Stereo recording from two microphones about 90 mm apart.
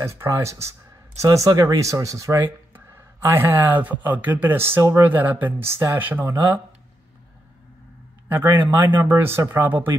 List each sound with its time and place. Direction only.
0.0 s speech: 30° right (ahead or behind)
5.0 s speech: 20° right (ahead or behind)
8.3 s speech: 20° right (ahead or behind)
9.7 s speech: 20° right (ahead or behind)